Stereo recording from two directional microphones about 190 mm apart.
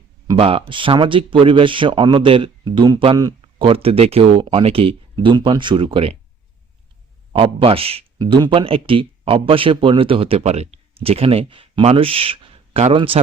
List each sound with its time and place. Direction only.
0.3 s a man's voice: 30° right (ahead or behind)
7.3 s a man's voice: 30° right (ahead or behind)